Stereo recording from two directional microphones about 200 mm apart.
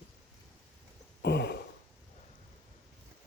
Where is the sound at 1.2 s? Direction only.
55° left (ahead or behind).